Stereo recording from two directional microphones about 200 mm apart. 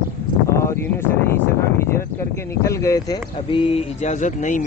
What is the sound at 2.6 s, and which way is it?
Speech, 15° left (ahead or behind).